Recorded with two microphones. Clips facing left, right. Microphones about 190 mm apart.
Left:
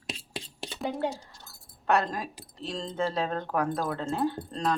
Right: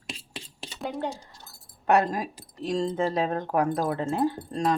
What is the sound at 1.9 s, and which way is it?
Speech, 15° right (ahead or behind).